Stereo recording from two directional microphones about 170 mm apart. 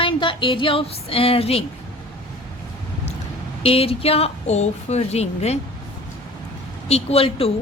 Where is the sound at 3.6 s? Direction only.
35° left (ahead or behind).